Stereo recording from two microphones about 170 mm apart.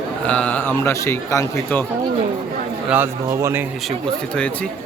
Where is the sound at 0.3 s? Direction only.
5° left (ahead or behind).